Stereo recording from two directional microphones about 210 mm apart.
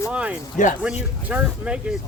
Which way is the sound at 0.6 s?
35° left (ahead or behind).